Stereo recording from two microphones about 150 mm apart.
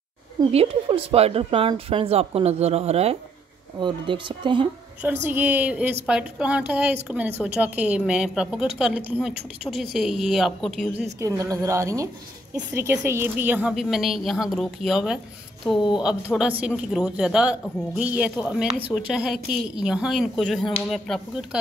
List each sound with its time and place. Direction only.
0.5 s speech: 40° right (ahead or behind)
3.8 s speech: 35° right (ahead or behind)
5.3 s a woman's voice: 10° right (ahead or behind)
11.1 s a woman's voice: 20° right (ahead or behind); by 21.5 s centre (ahead or behind)